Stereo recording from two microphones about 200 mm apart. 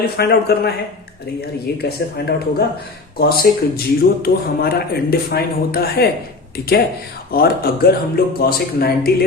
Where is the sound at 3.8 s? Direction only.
50° left (ahead or behind).